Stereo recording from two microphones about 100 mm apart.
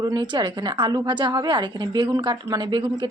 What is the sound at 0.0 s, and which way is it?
A woman's voice, 40° right (ahead or behind).